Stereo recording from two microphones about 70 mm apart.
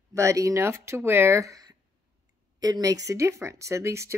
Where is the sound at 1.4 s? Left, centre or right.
Right.